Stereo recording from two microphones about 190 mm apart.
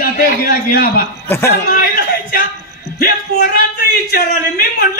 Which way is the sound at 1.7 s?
50° left (ahead or behind).